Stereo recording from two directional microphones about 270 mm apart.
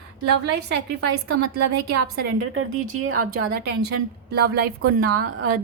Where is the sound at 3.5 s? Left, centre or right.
Right.